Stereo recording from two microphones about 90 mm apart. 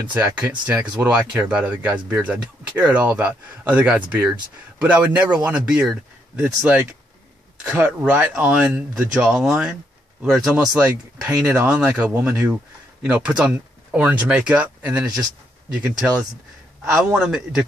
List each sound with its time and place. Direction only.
0.1 s speech: 20° right (ahead or behind)
8.0 s a man's voice: 10° right (ahead or behind)